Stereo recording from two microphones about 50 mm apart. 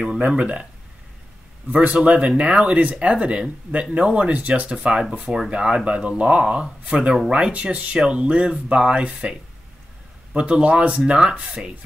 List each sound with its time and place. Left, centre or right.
0.2 s speech: right
1.8 s speech: right